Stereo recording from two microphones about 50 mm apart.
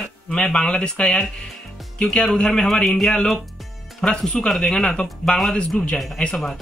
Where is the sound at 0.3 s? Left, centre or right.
Centre.